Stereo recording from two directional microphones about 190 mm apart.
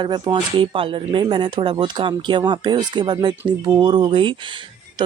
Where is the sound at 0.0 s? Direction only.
25° right (ahead or behind).